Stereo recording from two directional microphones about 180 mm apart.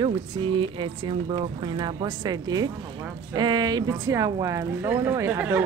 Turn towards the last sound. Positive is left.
turn(degrees=-10)  # may be behind; listen again after turning